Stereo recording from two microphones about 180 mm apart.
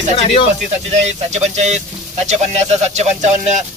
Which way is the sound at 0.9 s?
40° right (ahead or behind).